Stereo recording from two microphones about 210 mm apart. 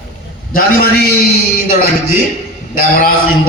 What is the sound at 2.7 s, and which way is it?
Speech, 45° left (ahead or behind).